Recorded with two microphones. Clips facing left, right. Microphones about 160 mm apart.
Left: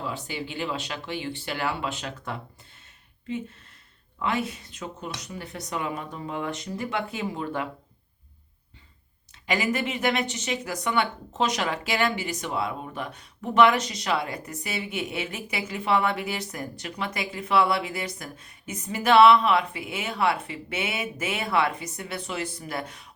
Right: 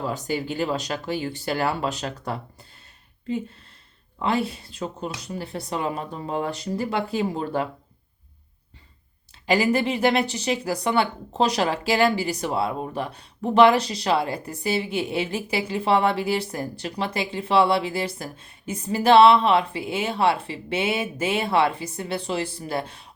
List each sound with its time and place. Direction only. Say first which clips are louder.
0.0 s speech: right 6 dB; 40° right (ahead or behind)
9.5 s speech: right 6 dB; 30° right (ahead or behind)